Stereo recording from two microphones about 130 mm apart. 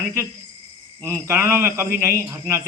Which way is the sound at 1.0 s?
20° right (ahead or behind).